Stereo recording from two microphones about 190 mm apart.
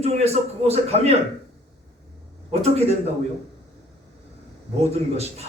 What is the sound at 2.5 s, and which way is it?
Speech, 35° right (ahead or behind).